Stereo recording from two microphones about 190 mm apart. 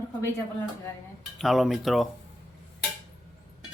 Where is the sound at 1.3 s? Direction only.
Centre (ahead or behind).